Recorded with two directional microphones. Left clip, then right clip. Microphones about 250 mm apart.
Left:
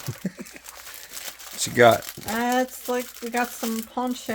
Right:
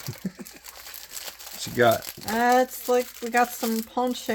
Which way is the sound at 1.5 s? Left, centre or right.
Left.